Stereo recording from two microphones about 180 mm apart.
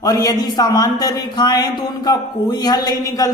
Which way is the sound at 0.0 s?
20° left (ahead or behind).